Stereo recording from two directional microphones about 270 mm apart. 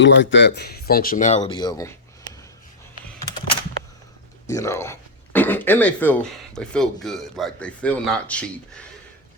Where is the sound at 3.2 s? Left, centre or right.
Centre.